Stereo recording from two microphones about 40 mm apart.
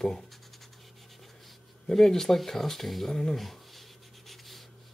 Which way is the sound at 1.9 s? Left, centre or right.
Centre.